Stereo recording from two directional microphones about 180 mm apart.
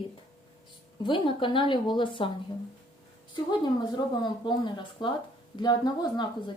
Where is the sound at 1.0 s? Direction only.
25° left (ahead or behind).